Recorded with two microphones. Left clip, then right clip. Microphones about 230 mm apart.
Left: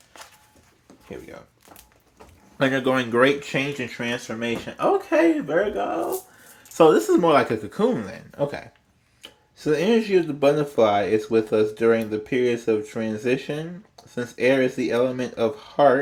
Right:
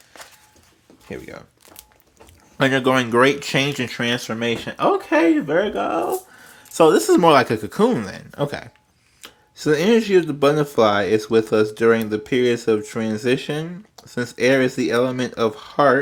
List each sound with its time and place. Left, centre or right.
2.6 s speech: right
6.7 s speech: right